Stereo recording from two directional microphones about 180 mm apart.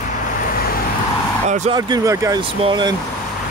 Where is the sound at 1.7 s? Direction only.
25° right (ahead or behind).